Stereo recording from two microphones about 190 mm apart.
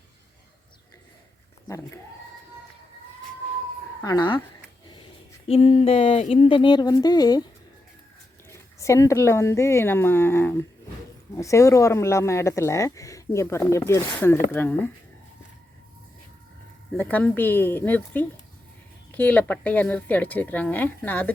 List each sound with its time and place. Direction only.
1.6 s speech: 15° left (ahead or behind)
4.0 s speech: 20° left (ahead or behind)
5.5 s speech: 30° left (ahead or behind)
8.4 s speech: 15° left (ahead or behind)
17.0 s speech: 10° left (ahead or behind)